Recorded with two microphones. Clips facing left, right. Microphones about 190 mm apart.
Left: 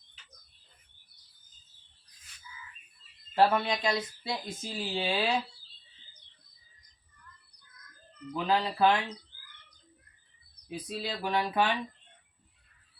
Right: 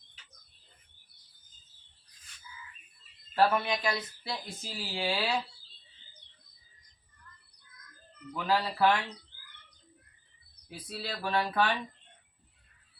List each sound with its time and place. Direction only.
3.3 s speech: 20° left (ahead or behind)
8.3 s speech: 20° left (ahead or behind)
10.7 s speech: 20° left (ahead or behind)